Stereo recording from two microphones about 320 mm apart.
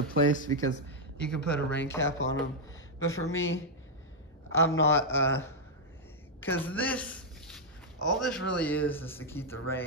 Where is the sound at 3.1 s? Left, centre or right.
Left.